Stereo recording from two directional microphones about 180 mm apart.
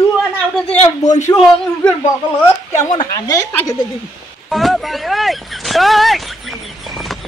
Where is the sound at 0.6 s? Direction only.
35° left (ahead or behind).